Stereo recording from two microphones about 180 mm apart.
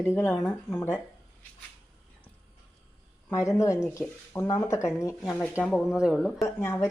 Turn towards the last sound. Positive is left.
turn(degrees=10)  # may be behind; listen again after turning